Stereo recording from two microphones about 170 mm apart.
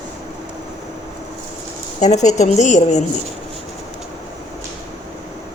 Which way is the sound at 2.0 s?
45° left (ahead or behind).